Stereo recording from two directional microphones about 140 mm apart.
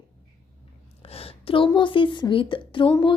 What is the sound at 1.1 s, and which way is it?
A woman's voice, 40° left (ahead or behind).